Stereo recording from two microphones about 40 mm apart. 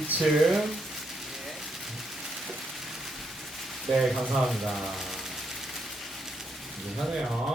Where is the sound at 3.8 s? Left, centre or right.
Centre.